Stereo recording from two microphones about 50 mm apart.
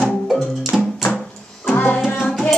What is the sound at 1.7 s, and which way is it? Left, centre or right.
Music, left.